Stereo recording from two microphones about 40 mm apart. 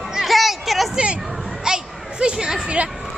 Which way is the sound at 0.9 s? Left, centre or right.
Right.